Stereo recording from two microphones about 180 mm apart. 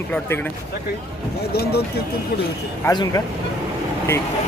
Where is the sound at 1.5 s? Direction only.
60° left (ahead or behind).